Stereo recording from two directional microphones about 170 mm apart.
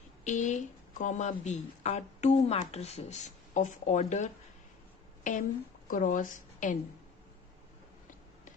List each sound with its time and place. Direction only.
0.3 s a woman's voice: 45° left (ahead or behind)